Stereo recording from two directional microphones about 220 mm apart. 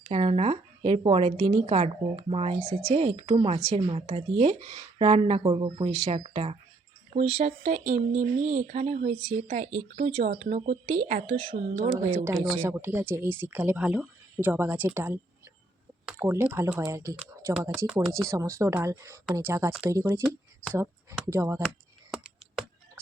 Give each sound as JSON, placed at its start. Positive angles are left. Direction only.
{"t": 0.0, "sound": "a woman's voice", "side_deg": -25}
{"t": 11.9, "sound": "speech", "side_deg": -10}